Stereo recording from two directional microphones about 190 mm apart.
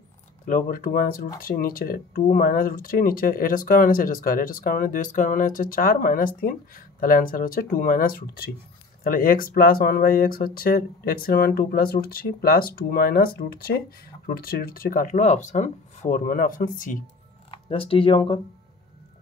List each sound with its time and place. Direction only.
0.5 s speech: 45° left (ahead or behind)
17.5 s speech: 30° left (ahead or behind)